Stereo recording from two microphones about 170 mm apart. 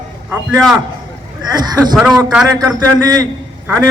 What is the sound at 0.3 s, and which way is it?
Speech, centre (ahead or behind).